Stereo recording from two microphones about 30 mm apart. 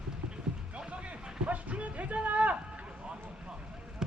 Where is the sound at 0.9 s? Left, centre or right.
Right.